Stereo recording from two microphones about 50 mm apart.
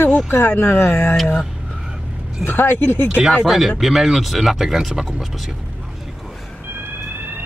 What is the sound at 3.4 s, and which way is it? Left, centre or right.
Speech, centre.